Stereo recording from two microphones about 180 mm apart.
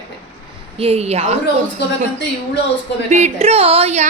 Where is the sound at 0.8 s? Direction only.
35° right (ahead or behind).